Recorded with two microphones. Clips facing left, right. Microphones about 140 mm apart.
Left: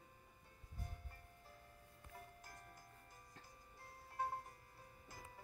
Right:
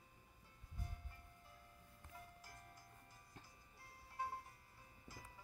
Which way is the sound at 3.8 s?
50° left (ahead or behind).